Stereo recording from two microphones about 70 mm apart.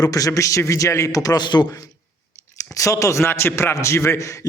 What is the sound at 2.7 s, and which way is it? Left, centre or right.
A man's voice, left.